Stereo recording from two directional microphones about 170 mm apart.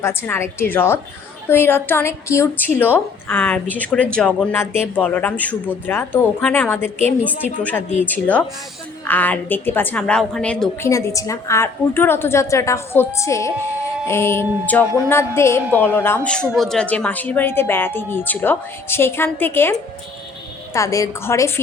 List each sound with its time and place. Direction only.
0.0 s speech: 15° left (ahead or behind)
10.8 s speech: 20° left (ahead or behind)
20.7 s speech: 20° left (ahead or behind)